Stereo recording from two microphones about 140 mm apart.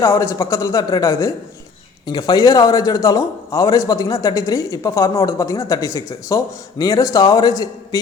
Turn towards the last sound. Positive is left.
turn(degrees=25)  # may be behind; listen again after turning